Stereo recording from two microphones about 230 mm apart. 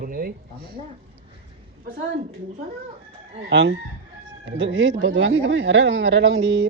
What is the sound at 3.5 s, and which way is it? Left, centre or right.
Speech, right.